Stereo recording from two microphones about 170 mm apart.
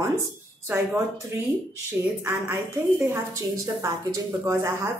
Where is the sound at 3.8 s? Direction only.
15° right (ahead or behind).